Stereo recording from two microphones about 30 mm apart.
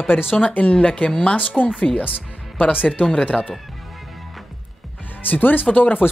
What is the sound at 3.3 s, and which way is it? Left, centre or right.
Speech, left.